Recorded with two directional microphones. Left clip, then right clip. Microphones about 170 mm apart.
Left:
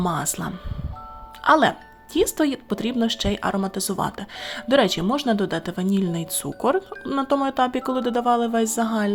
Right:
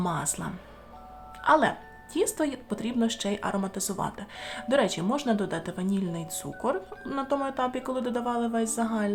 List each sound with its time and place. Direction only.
0.0 s speech: 35° left (ahead or behind)